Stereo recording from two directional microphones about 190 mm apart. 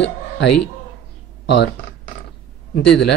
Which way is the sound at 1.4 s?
65° left (ahead or behind).